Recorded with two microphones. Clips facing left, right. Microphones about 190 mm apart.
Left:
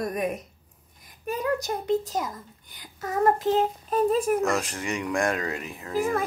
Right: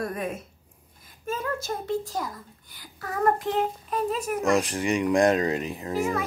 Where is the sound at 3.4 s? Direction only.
40° left (ahead or behind).